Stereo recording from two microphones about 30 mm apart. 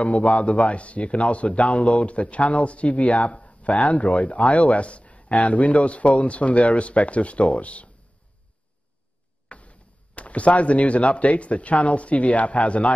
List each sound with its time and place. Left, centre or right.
0.0 s speech: left
9.5 s speech: left